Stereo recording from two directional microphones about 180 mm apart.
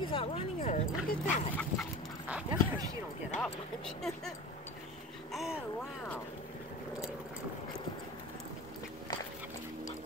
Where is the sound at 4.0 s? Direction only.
Centre (ahead or behind).